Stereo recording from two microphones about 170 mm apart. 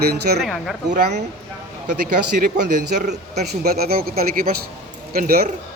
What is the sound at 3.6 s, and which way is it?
Speech, 65° right (ahead or behind).